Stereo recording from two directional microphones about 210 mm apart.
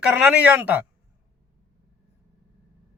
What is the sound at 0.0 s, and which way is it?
Speech, 5° right (ahead or behind).